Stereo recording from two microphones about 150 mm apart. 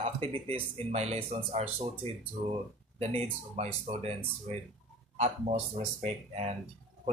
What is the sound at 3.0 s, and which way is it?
Speech, 45° right (ahead or behind).